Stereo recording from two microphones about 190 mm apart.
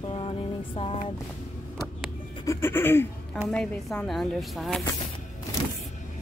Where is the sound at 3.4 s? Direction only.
5° left (ahead or behind).